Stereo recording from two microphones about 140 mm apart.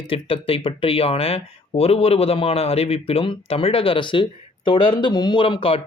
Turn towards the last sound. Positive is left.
turn(degrees=40)  # may be behind; listen again after turning